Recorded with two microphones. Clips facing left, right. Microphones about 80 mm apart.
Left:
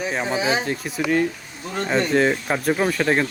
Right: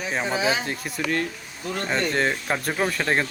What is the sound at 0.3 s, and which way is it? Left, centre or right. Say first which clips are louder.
Speech: left 1 dB; left.